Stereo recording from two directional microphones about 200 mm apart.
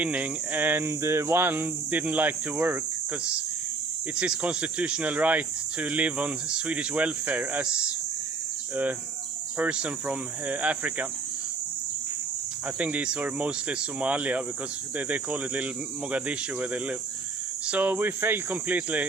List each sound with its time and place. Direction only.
0.0 s speech: 5° right (ahead or behind)
4.2 s speech: 5° right (ahead or behind)
12.6 s speech: 5° right (ahead or behind)